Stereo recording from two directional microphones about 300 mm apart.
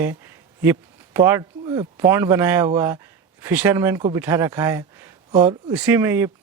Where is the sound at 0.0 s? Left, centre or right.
Centre.